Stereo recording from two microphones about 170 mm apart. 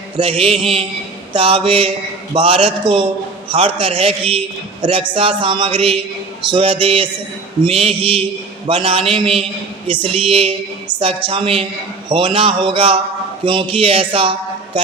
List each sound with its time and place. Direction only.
0.2 s a man's voice: 35° right (ahead or behind)